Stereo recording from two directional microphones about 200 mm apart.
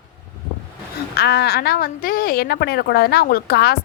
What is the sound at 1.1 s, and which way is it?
A woman's voice, 55° left (ahead or behind).